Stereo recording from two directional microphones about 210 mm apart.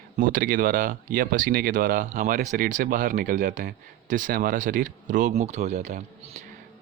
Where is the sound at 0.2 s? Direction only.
40° right (ahead or behind).